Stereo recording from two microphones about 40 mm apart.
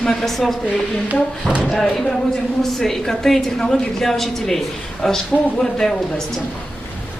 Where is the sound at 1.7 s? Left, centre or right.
Centre.